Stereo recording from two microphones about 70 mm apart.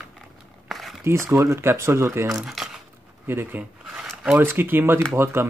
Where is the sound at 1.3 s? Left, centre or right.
Right.